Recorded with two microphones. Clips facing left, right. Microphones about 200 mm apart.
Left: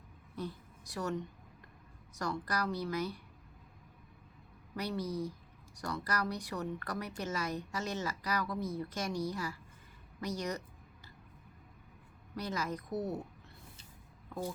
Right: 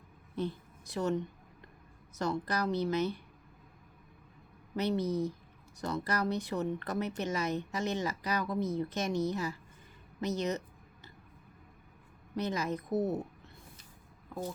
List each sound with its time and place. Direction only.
0.3 s a woman's voice: 25° right (ahead or behind)
4.8 s a woman's voice: 25° right (ahead or behind)
12.4 s a woman's voice: 20° right (ahead or behind)